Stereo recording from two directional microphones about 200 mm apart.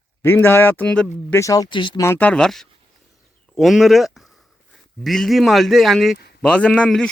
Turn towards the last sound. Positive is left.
turn(degrees=5)  # may be behind; listen again after turning